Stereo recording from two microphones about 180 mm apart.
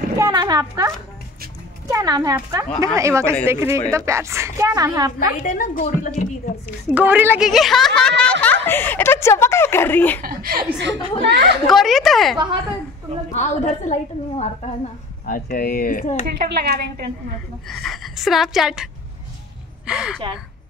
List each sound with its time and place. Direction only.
0.2 s a woman's voice: 20° right (ahead or behind)
5.4 s a woman's voice: 50° left (ahead or behind)
6.9 s a woman's voice: 10° right (ahead or behind); by 10.2 s 10° left (ahead or behind)
10.2 s a woman's voice: 55° right (ahead or behind)
10.8 s speech: 70° right (ahead or behind)
11.7 s a woman's voice: centre (ahead or behind)
13.3 s a woman's voice: 40° left (ahead or behind)
15.2 s a woman's voice: 50° left (ahead or behind)
16.3 s a woman's voice: 60° right (ahead or behind)
17.6 s a woman's voice: centre (ahead or behind)
19.9 s a woman's voice: 5° right (ahead or behind)